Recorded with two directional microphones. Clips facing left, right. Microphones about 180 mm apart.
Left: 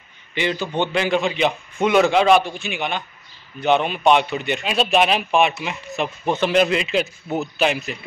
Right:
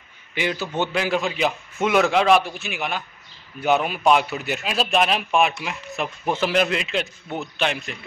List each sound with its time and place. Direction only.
0.3 s a man's voice: 5° right (ahead or behind)